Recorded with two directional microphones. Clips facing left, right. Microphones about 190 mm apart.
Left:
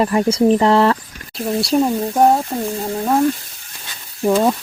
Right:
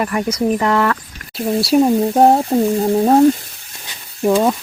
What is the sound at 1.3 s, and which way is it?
Speech, centre (ahead or behind).